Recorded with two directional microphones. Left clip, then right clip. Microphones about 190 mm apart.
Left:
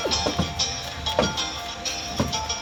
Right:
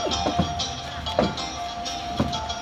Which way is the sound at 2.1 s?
15° left (ahead or behind).